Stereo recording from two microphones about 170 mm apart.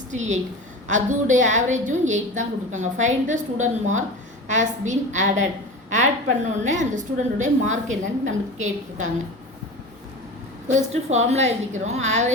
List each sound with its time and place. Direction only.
0.1 s a woman's voice: 45° right (ahead or behind)
10.7 s a woman's voice: 40° right (ahead or behind)